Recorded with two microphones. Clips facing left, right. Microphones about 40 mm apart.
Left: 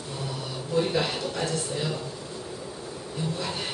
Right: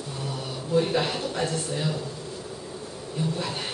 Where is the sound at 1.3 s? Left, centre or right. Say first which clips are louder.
Right 1 dB; centre.